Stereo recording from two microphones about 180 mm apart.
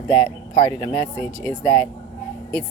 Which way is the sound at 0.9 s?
35° right (ahead or behind).